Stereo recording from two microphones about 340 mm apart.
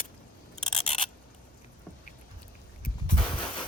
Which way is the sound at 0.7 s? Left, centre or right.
Centre.